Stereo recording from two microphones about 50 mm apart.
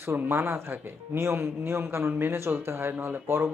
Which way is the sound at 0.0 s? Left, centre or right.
Right.